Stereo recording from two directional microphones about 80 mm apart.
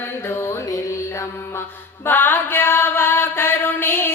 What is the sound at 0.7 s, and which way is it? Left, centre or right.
Mantra, left.